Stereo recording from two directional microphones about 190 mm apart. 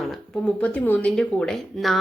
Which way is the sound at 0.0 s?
Centre (ahead or behind).